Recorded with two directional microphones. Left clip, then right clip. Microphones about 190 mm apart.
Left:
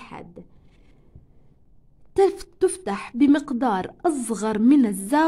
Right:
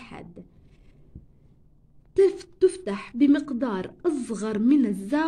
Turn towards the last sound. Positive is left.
turn(degrees=45)  # may be behind; listen again after turning